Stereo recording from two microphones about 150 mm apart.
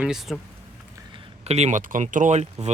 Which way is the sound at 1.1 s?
45° right (ahead or behind).